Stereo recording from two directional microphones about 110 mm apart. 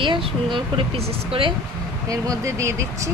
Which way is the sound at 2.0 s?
30° right (ahead or behind).